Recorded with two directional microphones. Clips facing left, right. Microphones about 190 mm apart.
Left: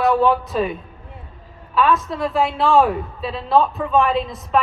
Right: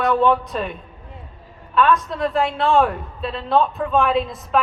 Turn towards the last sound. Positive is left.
turn(degrees=0)  # may be behind; listen again after turning